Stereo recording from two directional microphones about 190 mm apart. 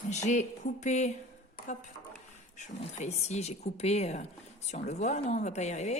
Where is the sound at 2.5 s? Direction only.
40° left (ahead or behind).